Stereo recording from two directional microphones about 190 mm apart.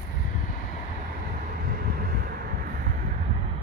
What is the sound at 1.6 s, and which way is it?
Vehicle, 50° right (ahead or behind).